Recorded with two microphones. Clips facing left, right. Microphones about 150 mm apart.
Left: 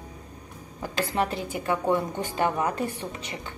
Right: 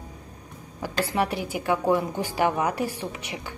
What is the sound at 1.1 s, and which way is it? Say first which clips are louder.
A woman's voice: right 1 dB; 10° right (ahead or behind).